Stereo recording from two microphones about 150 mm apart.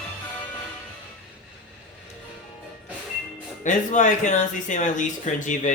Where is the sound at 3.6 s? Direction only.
55° left (ahead or behind).